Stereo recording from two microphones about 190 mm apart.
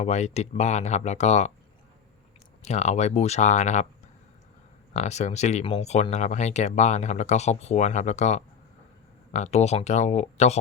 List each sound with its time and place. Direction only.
0.0 s speech: 35° left (ahead or behind)
2.6 s speech: 35° left (ahead or behind)
4.9 s speech: 35° left (ahead or behind)